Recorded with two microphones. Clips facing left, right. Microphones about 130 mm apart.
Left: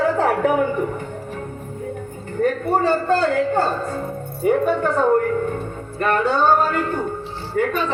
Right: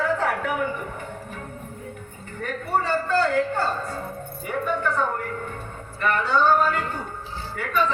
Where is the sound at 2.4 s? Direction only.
40° left (ahead or behind).